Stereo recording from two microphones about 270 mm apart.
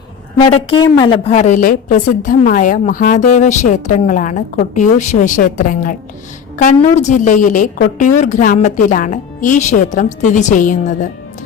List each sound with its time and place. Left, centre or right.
0.3 s a woman's voice: centre